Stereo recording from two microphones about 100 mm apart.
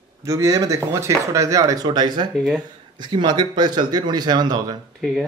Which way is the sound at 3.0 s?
50° right (ahead or behind).